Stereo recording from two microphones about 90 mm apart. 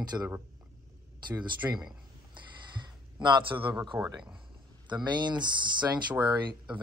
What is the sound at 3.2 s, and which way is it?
Speech, 55° right (ahead or behind).